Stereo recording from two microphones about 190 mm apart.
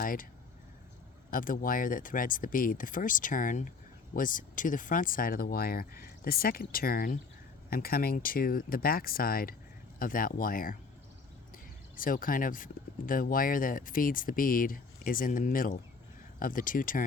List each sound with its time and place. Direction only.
0.0 s speech: 45° left (ahead or behind)
1.3 s speech: 45° left (ahead or behind)